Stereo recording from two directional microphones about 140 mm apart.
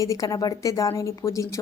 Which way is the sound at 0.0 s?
25° left (ahead or behind).